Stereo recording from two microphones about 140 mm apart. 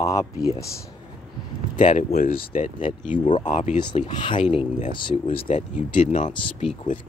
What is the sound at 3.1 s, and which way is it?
Speech, 60° left (ahead or behind).